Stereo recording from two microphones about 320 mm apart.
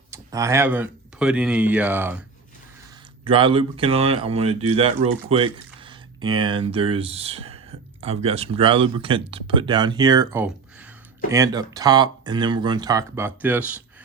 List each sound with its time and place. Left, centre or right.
0.1 s speech: centre
3.2 s speech: centre